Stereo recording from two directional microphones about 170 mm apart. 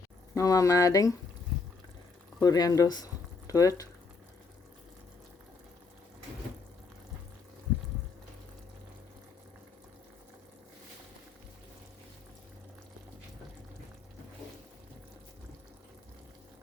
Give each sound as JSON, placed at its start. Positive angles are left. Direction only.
{"t": 0.3, "sound": "speech", "side_deg": 20}
{"t": 2.4, "sound": "speech", "side_deg": 20}